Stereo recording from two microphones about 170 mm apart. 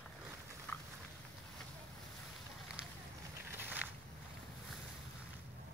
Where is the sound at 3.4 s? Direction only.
10° right (ahead or behind).